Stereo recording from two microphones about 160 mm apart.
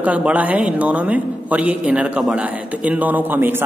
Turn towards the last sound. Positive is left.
turn(degrees=-10)  # may be behind; listen again after turning